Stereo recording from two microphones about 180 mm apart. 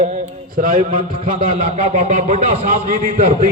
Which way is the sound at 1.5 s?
35° right (ahead or behind).